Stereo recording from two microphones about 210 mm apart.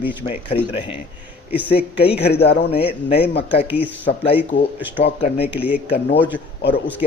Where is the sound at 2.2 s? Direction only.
50° left (ahead or behind).